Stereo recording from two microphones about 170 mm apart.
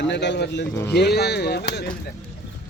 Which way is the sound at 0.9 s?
75° left (ahead or behind).